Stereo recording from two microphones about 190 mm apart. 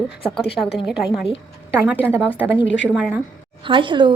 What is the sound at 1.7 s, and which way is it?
A woman's voice, 10° right (ahead or behind).